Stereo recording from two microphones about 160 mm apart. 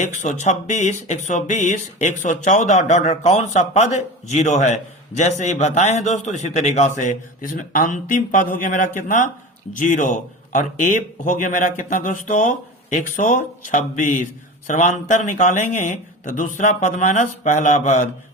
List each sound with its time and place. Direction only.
0.0 s speech: 50° left (ahead or behind)